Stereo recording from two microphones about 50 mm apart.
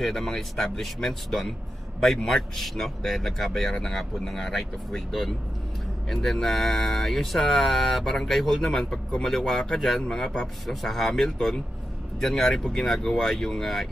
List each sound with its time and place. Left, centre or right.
0.0 s a man's voice: centre
10.0 s speech: centre
10.4 s a man's voice: centre